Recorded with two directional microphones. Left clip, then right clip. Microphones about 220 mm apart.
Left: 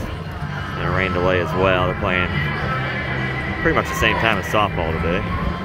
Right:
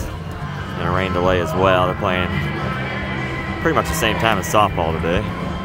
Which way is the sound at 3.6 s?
10° right (ahead or behind).